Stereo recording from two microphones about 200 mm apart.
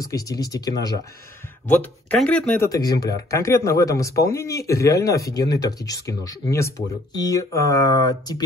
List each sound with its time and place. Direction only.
0.0 s speech: 15° left (ahead or behind)